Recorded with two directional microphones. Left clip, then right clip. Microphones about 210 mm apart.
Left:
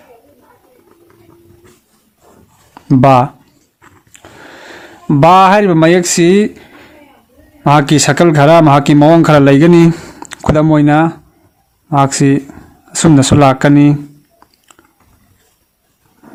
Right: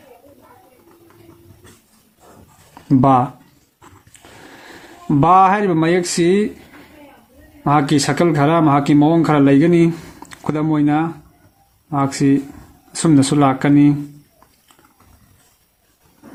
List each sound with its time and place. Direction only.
2.9 s speech: 40° left (ahead or behind)
4.1 s a sound: 40° left (ahead or behind)
7.6 s speech: 45° left (ahead or behind)